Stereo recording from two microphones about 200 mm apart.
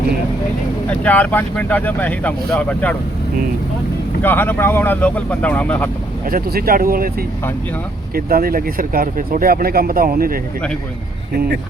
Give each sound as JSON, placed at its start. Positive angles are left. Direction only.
{"t": 0.9, "sound": "speech", "side_deg": 10}
{"t": 4.2, "sound": "speech", "side_deg": 10}
{"t": 6.2, "sound": "speech", "side_deg": -50}